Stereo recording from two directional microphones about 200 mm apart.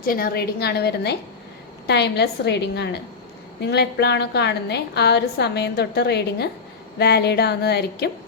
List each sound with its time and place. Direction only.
0.0 s a woman's voice: 45° left (ahead or behind)